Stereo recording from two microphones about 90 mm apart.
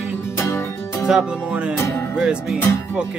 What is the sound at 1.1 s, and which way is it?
Music, 10° right (ahead or behind).